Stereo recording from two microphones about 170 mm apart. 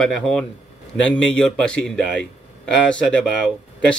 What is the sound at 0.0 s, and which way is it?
A man's voice, 5° left (ahead or behind).